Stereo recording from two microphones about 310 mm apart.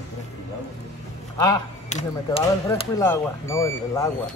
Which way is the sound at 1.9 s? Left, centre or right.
Left.